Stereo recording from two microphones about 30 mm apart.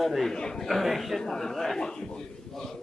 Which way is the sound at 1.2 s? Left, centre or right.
Centre.